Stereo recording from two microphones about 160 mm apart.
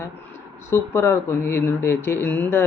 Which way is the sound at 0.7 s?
15° left (ahead or behind).